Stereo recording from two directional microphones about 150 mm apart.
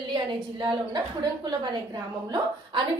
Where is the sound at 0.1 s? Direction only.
30° right (ahead or behind).